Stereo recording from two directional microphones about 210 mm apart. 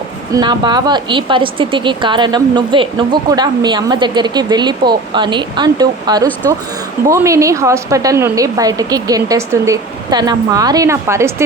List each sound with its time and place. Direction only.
0.3 s a woman's voice: 20° right (ahead or behind)